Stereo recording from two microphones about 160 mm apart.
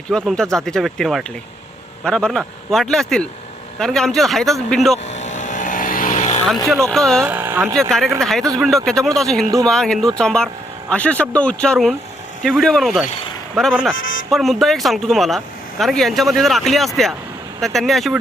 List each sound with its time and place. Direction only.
0.3 s speech: 5° left (ahead or behind)
5.1 s vehicle: 45° left (ahead or behind)
6.7 s speech: centre (ahead or behind)
7.3 s speech: 10° right (ahead or behind)
7.8 s speech: centre (ahead or behind)